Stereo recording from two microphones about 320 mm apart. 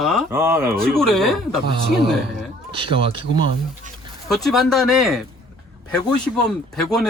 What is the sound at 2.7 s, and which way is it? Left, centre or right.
Speech, centre.